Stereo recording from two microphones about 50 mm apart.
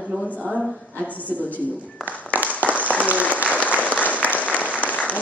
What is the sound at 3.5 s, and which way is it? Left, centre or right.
Applause, left.